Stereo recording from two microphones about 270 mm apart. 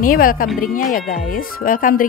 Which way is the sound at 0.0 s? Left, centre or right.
Left.